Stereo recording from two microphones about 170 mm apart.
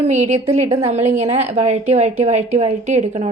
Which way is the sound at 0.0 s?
40° right (ahead or behind).